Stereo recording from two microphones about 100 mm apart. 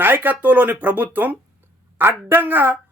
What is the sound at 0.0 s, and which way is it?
Speech, 20° right (ahead or behind).